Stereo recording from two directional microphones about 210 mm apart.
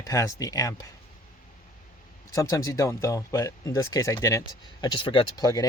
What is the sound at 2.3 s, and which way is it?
Speech, 15° left (ahead or behind).